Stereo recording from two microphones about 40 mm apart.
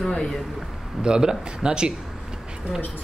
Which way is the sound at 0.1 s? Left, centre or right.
Centre.